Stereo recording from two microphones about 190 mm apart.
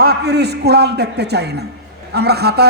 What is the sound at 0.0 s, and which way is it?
A man's voice, 55° right (ahead or behind).